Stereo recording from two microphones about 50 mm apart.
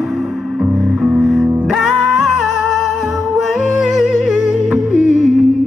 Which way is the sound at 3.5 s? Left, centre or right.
Centre.